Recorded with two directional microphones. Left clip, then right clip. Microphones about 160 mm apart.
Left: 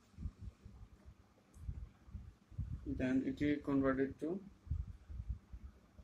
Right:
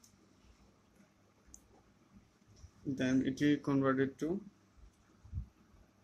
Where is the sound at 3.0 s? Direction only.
50° right (ahead or behind).